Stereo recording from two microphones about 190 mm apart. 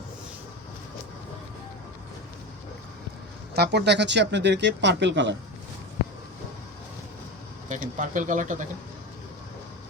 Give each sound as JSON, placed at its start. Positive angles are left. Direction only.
{"t": 3.5, "sound": "speech", "side_deg": -60}
{"t": 7.7, "sound": "speech", "side_deg": -40}